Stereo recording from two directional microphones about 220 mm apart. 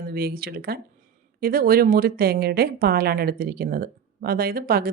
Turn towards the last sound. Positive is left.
turn(degrees=-40)  # may be behind; listen again after turning